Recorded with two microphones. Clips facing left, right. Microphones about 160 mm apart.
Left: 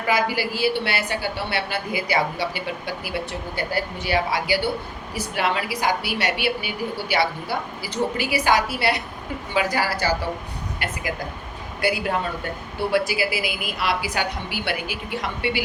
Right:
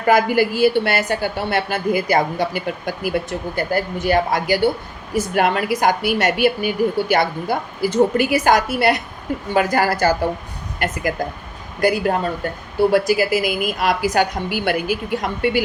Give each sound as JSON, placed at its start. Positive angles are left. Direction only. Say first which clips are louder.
{"t": 0.0, "sound": "a woman's voice", "louder": "right 7 dB", "side_deg": -50}